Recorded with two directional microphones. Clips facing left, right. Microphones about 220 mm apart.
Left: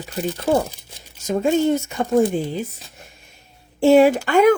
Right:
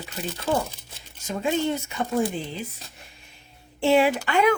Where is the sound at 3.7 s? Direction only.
45° left (ahead or behind).